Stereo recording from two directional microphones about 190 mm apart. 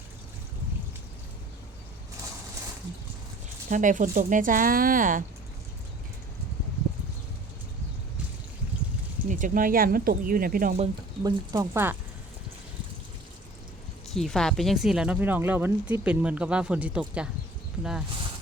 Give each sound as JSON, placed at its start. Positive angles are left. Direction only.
{"t": 3.7, "sound": "speech", "side_deg": -40}
{"t": 9.3, "sound": "speech", "side_deg": -45}
{"t": 11.2, "sound": "speech", "side_deg": -20}
{"t": 14.1, "sound": "speech", "side_deg": 0}